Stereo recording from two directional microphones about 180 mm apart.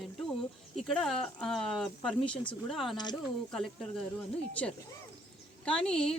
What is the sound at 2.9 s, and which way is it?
Speech, 25° left (ahead or behind).